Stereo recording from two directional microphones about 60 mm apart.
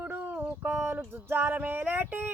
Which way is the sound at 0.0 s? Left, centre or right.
Right.